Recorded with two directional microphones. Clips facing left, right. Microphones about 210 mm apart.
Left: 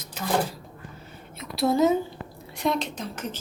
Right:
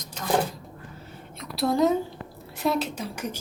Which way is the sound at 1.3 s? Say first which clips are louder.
Left 1 dB; centre (ahead or behind).